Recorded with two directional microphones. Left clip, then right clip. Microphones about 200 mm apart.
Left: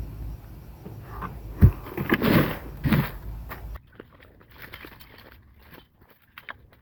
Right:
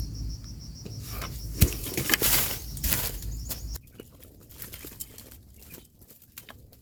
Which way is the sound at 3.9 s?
55° right (ahead or behind).